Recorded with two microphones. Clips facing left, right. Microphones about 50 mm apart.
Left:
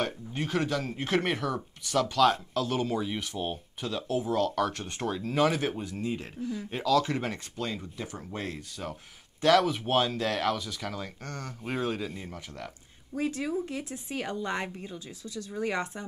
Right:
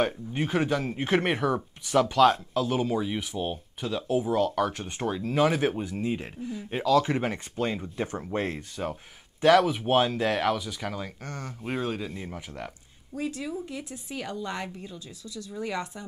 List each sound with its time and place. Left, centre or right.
0.0 s speech: centre
2.5 s speech: centre; by 8.9 s right
9.4 s speech: centre
12.3 s speech: centre
13.1 s a woman's voice: left